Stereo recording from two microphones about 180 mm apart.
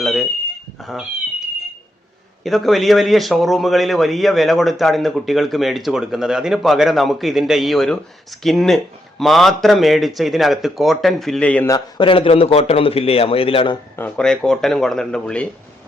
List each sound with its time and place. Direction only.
0.0 s a man's voice: centre (ahead or behind)
2.4 s a man's voice: centre (ahead or behind)
11.7 s speech: 25° left (ahead or behind)
13.9 s a man's voice: 10° left (ahead or behind)